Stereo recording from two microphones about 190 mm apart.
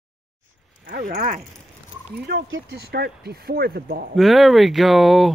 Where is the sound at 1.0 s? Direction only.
50° right (ahead or behind).